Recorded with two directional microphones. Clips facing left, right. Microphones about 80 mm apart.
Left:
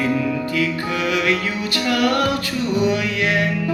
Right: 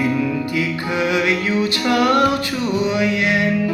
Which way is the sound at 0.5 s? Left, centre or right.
Centre.